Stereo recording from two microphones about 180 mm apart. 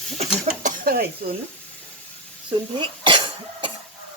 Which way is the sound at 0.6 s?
45° right (ahead or behind).